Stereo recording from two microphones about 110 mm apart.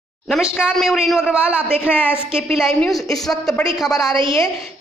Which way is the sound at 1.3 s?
10° right (ahead or behind).